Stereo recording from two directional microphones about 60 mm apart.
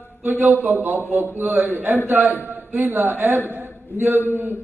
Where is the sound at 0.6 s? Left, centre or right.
Right.